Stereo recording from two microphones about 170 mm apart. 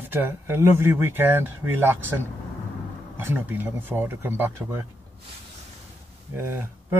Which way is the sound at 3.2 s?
10° right (ahead or behind).